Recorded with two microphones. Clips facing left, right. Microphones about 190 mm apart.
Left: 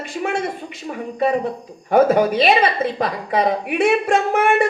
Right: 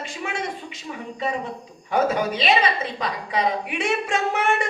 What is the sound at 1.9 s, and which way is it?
A woman's voice, 55° left (ahead or behind).